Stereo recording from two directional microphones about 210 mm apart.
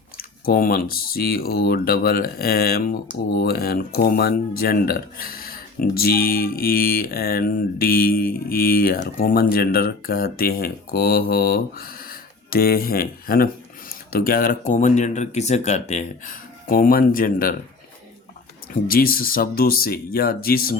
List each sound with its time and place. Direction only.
0.2 s speech: 45° left (ahead or behind)
18.7 s speech: 45° left (ahead or behind)